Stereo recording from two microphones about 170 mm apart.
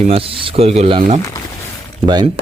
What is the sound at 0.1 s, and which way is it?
Speech, 35° right (ahead or behind).